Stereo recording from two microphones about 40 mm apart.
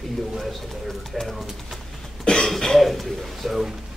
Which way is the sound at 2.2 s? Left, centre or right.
Centre.